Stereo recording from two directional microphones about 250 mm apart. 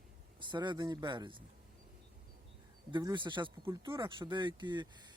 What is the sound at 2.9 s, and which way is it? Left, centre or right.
Speech, centre.